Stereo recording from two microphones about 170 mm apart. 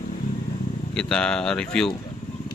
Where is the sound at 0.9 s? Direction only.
5° left (ahead or behind).